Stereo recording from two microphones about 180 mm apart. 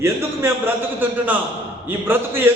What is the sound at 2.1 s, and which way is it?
Speech, 10° right (ahead or behind).